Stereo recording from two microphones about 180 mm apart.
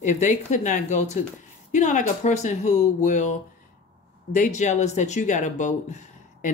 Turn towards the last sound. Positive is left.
turn(degrees=45)  # may be behind; listen again after turning